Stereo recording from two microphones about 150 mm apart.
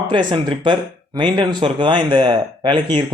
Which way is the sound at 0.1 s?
30° right (ahead or behind).